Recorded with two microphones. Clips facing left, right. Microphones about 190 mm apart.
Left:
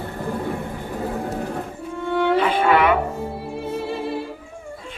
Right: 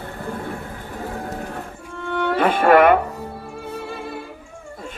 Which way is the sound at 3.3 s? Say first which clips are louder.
Left 4 dB; 25° left (ahead or behind).